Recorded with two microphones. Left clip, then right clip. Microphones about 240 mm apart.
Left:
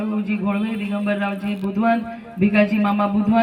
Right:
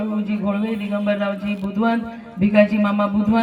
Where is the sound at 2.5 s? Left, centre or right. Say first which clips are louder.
Right 3 dB; right.